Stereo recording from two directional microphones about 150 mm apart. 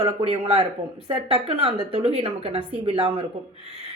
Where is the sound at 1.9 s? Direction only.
40° right (ahead or behind).